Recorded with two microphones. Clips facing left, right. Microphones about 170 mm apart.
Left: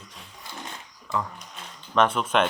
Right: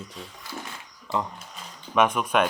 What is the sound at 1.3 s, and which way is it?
Speech, 5° right (ahead or behind).